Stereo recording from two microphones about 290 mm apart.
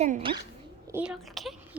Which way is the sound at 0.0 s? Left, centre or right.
Centre.